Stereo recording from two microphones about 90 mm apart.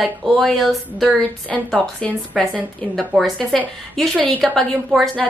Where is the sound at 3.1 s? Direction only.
15° right (ahead or behind).